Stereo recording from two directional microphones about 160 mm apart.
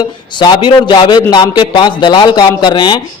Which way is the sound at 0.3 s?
30° left (ahead or behind).